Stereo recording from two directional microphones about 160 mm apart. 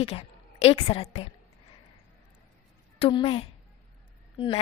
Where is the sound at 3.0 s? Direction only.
30° left (ahead or behind).